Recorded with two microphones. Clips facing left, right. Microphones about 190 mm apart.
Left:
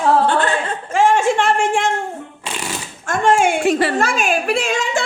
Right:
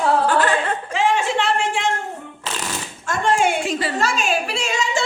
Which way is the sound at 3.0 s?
50° left (ahead or behind).